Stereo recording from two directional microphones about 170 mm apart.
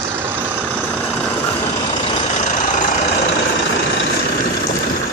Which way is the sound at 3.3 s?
90° left.